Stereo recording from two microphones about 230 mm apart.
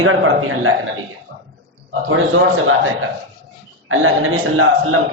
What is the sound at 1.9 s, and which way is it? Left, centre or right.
Speech, right.